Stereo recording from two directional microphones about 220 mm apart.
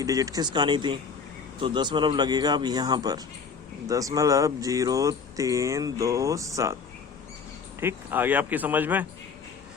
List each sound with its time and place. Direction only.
0.0 s speech: 15° right (ahead or behind)
7.8 s speech: 10° right (ahead or behind)